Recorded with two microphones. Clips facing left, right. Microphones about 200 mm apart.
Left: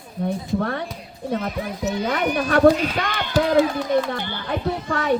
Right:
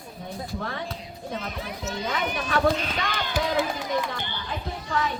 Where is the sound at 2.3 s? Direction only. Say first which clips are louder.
Left 8 dB; 40° left (ahead or behind).